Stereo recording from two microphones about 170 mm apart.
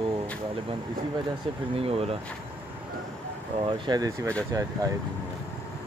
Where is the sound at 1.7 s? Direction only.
35° right (ahead or behind).